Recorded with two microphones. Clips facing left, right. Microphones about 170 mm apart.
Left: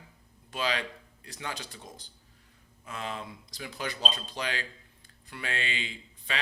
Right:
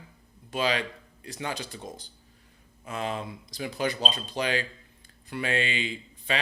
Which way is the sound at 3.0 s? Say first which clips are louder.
Right 4 dB; 15° right (ahead or behind).